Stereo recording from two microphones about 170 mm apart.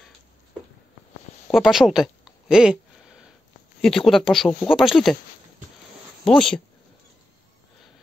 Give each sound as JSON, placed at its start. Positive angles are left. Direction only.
{"t": 1.5, "sound": "a sound", "side_deg": 0}
{"t": 3.8, "sound": "speech", "side_deg": 0}
{"t": 6.2, "sound": "speech", "side_deg": 5}